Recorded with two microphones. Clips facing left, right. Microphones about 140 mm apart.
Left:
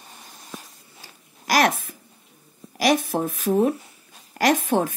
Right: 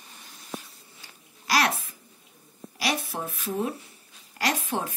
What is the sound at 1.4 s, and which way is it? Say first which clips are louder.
A woman's voice: left 5 dB; 50° left (ahead or behind).